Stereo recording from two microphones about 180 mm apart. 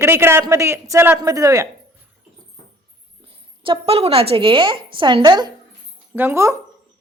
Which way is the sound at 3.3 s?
30° right (ahead or behind).